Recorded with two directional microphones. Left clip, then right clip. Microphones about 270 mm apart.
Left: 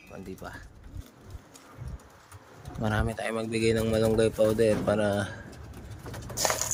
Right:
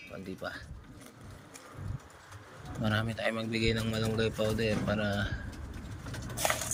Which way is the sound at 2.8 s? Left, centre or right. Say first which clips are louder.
Left 2 dB; centre.